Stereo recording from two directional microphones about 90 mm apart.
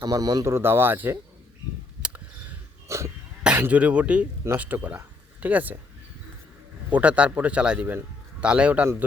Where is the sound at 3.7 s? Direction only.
15° right (ahead or behind).